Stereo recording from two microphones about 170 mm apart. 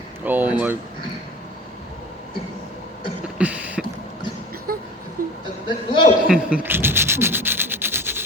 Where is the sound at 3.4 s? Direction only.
10° right (ahead or behind).